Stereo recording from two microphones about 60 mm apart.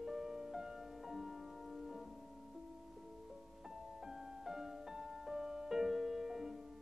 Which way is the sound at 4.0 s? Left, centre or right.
Centre.